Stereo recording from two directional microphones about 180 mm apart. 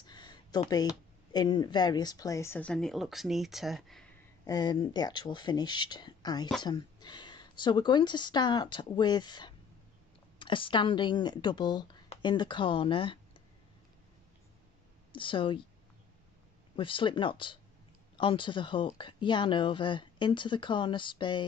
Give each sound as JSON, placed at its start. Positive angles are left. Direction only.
{"t": 0.0, "sound": "computer keyboard", "side_deg": 25}
{"t": 1.3, "sound": "speech", "side_deg": 25}
{"t": 4.5, "sound": "speech", "side_deg": 20}
{"t": 15.1, "sound": "speech", "side_deg": 30}
{"t": 16.7, "sound": "speech", "side_deg": 30}